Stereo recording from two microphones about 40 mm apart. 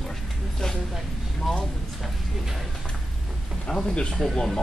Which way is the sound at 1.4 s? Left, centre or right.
Centre.